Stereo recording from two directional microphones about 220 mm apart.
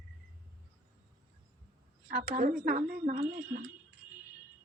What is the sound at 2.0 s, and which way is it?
A woman's voice, 40° right (ahead or behind).